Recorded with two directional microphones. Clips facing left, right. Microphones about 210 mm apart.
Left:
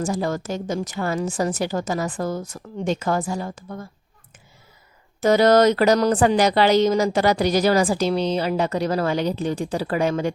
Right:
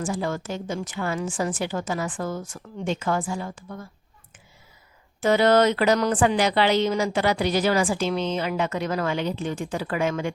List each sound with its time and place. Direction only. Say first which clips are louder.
0.0 s a woman's voice: left 3 dB; 40° left (ahead or behind)
5.2 s a woman's voice: left 3 dB; 40° left (ahead or behind)